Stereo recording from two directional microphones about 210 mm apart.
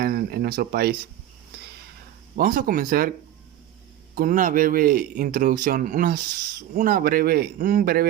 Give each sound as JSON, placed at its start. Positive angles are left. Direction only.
{"t": 0.0, "sound": "speech", "side_deg": -45}
{"t": 2.4, "sound": "speech", "side_deg": -45}
{"t": 4.1, "sound": "speech", "side_deg": -45}